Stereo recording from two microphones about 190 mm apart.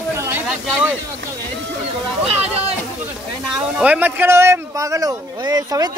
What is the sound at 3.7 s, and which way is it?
Speech, 5° right (ahead or behind).